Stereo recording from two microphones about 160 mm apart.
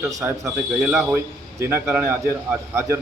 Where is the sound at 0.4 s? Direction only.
5° right (ahead or behind).